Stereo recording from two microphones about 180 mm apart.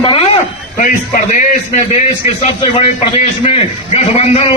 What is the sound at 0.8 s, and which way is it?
Speech, 50° left (ahead or behind).